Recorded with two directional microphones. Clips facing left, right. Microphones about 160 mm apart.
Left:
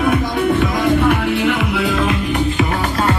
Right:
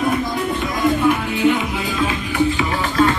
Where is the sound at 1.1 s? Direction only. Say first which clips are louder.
Left 1 dB; 75° left (ahead or behind).